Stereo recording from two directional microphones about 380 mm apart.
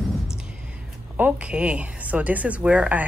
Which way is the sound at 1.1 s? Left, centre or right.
Centre.